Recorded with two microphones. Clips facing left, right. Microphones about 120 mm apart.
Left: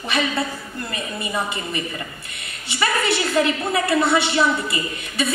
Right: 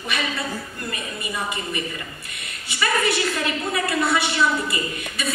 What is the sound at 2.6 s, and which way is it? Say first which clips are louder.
A woman's voice: left 1 dB; 25° left (ahead or behind).